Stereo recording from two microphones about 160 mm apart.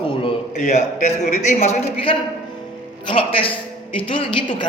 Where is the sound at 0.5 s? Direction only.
50° left (ahead or behind).